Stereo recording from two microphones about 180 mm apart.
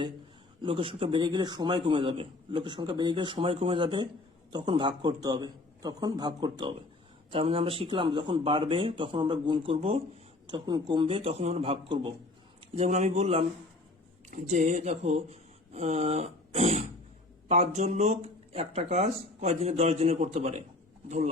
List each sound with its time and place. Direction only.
0.6 s a man's voice: 30° right (ahead or behind)